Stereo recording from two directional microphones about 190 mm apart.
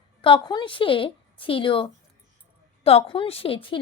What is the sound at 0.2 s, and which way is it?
A woman's voice, 25° left (ahead or behind).